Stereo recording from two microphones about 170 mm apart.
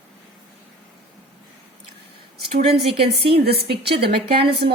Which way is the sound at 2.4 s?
65° right (ahead or behind).